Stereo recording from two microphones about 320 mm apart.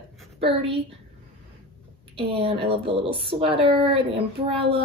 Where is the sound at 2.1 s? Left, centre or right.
Centre.